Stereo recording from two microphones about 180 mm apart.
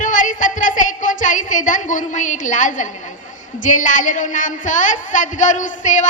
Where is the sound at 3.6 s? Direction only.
45° left (ahead or behind).